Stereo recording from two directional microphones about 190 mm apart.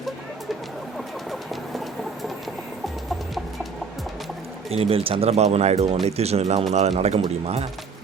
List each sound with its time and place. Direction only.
0.9 s rodents: centre (ahead or behind)
4.7 s speech: 30° right (ahead or behind)